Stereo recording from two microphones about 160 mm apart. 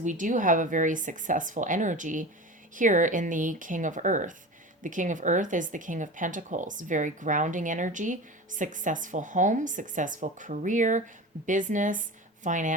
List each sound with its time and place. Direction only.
0.0 s speech: 50° right (ahead or behind)